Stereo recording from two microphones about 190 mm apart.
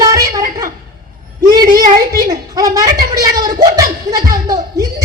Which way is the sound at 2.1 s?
20° right (ahead or behind).